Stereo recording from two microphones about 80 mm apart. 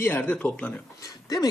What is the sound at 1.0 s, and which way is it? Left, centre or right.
Speech, left.